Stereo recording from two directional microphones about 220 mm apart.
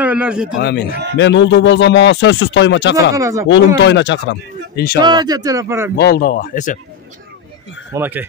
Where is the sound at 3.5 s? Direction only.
55° left (ahead or behind).